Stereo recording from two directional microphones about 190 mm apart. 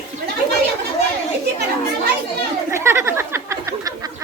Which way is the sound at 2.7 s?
15° right (ahead or behind).